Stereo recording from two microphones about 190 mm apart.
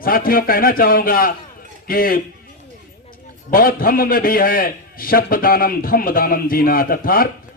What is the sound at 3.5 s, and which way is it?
Speech, 50° left (ahead or behind).